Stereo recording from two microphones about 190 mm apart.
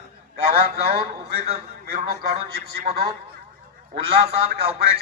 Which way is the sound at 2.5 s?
55° right (ahead or behind).